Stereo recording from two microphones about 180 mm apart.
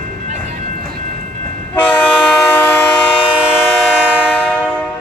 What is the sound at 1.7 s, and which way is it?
Train, 10° left (ahead or behind).